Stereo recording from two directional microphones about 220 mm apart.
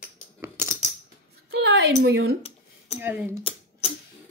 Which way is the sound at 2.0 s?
50° right (ahead or behind).